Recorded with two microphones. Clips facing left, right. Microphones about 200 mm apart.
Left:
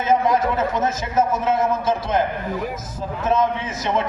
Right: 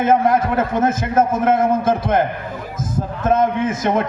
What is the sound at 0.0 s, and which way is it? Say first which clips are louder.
A man's voice: right 3 dB; 55° right (ahead or behind).